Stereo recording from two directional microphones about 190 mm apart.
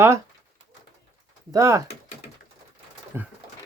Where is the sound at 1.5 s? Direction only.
15° right (ahead or behind).